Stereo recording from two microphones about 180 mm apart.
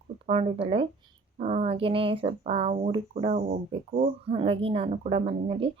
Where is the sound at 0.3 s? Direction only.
30° right (ahead or behind).